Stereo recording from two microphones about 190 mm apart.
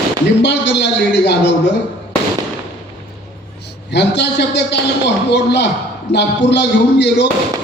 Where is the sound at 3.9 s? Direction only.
60° left (ahead or behind).